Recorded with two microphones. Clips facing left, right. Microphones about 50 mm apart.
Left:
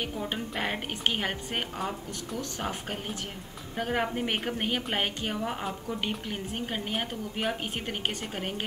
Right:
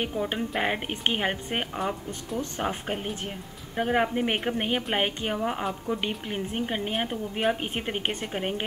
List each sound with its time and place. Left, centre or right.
0.0 s speech: centre
5.9 s speech: centre
7.6 s a woman's voice: centre